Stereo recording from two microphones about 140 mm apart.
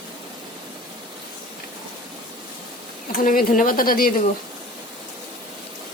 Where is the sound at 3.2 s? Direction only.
85° left.